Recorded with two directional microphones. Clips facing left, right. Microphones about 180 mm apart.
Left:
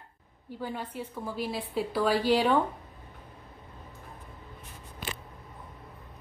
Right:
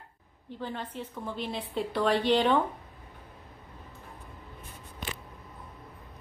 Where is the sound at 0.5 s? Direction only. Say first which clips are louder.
Left 1 dB; 10° left (ahead or behind).